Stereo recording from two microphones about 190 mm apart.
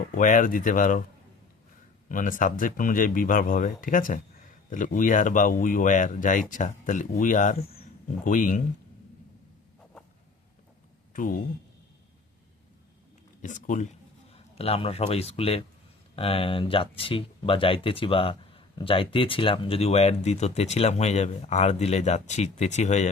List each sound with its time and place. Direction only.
0.1 s speech: 45° left (ahead or behind)
2.0 s speech: 45° left (ahead or behind)
11.1 s speech: 45° left (ahead or behind)
13.4 s speech: 40° left (ahead or behind)